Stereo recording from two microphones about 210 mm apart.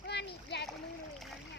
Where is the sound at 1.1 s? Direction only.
Centre (ahead or behind).